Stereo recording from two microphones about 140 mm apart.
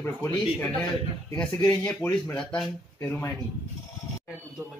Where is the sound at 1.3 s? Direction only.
15° left (ahead or behind).